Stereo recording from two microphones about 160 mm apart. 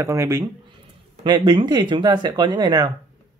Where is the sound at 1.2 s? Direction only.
30° right (ahead or behind).